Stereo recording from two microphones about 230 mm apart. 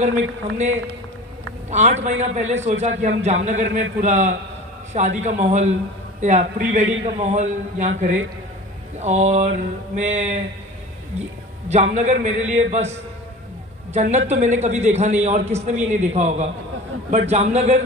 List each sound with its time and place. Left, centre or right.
0.6 s a man's voice: right
9.0 s a man's voice: right
13.9 s a man's voice: right